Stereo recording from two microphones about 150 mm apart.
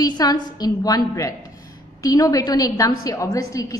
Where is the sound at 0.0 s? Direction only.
25° left (ahead or behind).